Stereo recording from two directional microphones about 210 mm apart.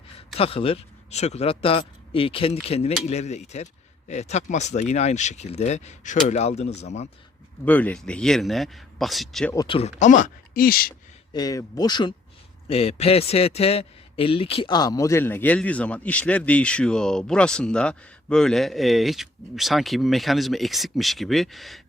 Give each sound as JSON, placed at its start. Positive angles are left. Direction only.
{"t": 0.3, "sound": "a man's voice", "side_deg": 25}
{"t": 7.6, "sound": "a man's voice", "side_deg": 5}
{"t": 9.6, "sound": "a man's voice", "side_deg": 25}
{"t": 10.0, "sound": "speech", "side_deg": 35}
{"t": 11.3, "sound": "a man's voice", "side_deg": 15}